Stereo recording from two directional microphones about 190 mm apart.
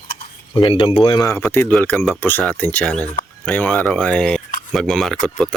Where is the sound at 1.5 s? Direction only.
5° left (ahead or behind).